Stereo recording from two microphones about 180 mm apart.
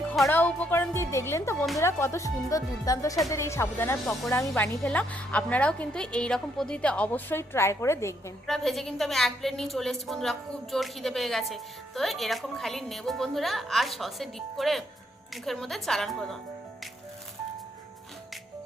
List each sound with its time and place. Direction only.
0.0 s a woman's voice: 5° left (ahead or behind)
8.4 s a woman's voice: centre (ahead or behind)